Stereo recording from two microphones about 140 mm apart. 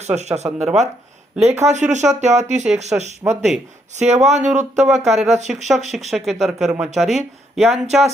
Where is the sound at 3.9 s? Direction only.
55° right (ahead or behind).